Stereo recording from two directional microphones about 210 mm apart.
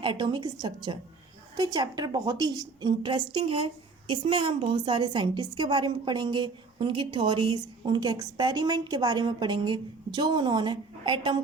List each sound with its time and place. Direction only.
0.0 s a woman's voice: 25° right (ahead or behind)